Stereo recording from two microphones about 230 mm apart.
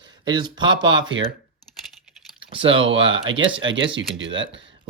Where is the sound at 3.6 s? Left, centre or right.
Right.